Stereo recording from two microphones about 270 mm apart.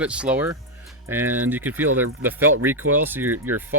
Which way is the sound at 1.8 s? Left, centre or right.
Right.